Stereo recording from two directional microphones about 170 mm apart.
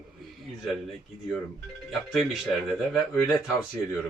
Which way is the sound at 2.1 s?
Centre (ahead or behind).